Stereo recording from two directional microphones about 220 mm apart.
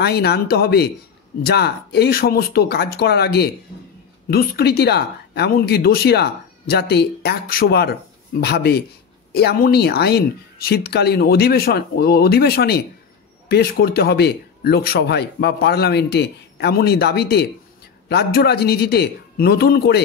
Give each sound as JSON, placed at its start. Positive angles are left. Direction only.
{"t": 0.0, "sound": "speech", "side_deg": 45}